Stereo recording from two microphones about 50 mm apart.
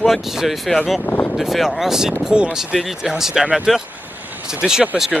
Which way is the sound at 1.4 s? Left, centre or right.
Centre.